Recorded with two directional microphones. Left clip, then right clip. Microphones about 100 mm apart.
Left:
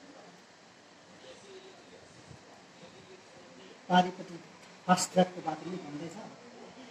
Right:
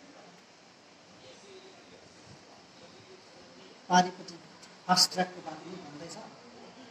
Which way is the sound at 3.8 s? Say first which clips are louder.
Right 2 dB; 25° left (ahead or behind).